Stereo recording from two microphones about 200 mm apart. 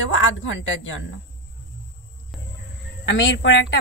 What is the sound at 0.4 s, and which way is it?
Speech, 70° left (ahead or behind).